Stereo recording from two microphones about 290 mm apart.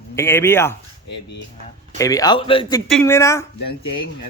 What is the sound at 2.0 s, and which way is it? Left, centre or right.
A man's voice, centre.